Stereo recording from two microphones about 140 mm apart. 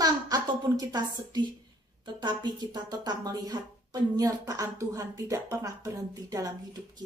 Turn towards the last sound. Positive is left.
turn(degrees=-25)  # may be behind; listen again after turning